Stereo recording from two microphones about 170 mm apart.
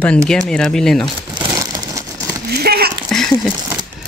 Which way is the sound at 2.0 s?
20° right (ahead or behind).